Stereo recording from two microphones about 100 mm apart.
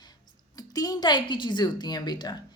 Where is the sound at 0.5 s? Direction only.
40° left (ahead or behind).